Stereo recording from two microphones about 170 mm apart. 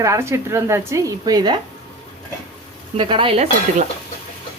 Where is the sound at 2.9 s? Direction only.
30° right (ahead or behind).